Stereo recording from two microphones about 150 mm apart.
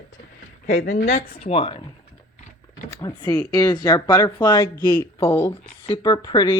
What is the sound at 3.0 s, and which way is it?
Speech, 25° left (ahead or behind).